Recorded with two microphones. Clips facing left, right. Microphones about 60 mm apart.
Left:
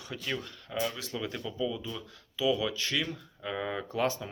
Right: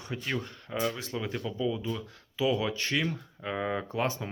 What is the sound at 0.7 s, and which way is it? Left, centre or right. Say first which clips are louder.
Speech: right 2 dB; centre.